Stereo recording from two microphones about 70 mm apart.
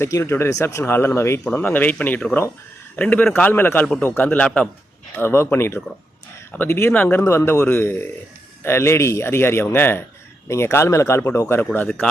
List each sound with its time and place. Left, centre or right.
0.0 s speech: left
1.5 s a man's voice: left
5.1 s speech: left